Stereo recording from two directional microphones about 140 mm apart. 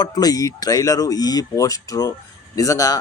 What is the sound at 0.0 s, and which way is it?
Speech, 30° left (ahead or behind).